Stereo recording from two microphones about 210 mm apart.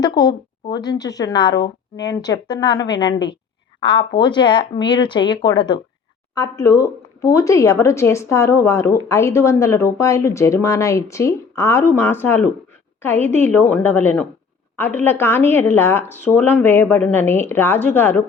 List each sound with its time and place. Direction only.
0.0 s a woman's voice: 20° left (ahead or behind)